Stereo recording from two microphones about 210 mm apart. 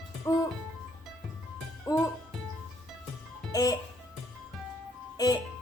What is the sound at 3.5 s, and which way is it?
Music, 15° left (ahead or behind).